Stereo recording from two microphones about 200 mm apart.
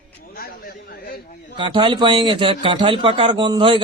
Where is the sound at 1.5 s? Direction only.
25° right (ahead or behind).